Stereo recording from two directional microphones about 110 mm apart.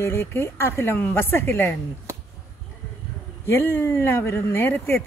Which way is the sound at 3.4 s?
20° left (ahead or behind).